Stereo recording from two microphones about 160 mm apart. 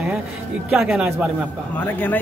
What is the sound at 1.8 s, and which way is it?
Speech, 10° left (ahead or behind).